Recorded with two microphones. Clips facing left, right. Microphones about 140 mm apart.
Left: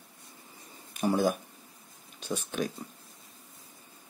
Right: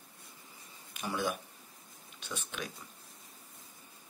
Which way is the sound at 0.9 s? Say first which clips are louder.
Left 8 dB; 40° left (ahead or behind).